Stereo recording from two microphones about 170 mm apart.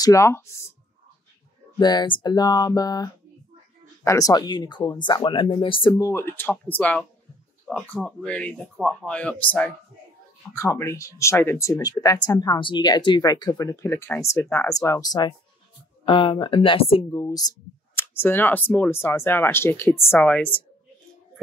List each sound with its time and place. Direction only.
0.0 s speech: 15° left (ahead or behind)
1.8 s speech: 25° left (ahead or behind); by 20.6 s 10° left (ahead or behind)